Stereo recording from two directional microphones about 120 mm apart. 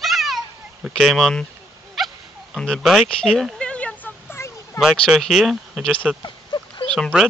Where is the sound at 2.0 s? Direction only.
Centre (ahead or behind).